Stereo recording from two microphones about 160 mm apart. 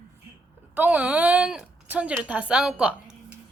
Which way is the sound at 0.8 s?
10° right (ahead or behind).